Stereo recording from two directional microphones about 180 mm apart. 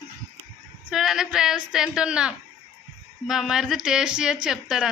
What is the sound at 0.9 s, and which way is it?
Speech, centre (ahead or behind).